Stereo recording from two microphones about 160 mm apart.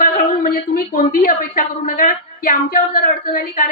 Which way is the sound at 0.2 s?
60° left (ahead or behind).